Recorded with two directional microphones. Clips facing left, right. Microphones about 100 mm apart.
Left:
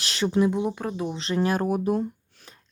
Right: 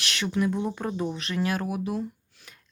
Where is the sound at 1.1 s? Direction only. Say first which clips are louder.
Left 4 dB; 30° left (ahead or behind).